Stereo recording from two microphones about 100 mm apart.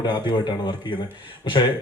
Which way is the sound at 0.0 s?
45° left (ahead or behind).